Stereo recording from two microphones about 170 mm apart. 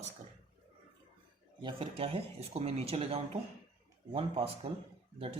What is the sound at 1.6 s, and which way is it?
Speech, 35° right (ahead or behind).